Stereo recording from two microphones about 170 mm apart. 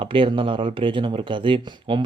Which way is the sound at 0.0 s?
30° right (ahead or behind).